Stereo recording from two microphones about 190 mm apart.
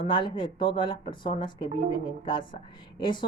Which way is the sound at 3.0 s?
25° left (ahead or behind).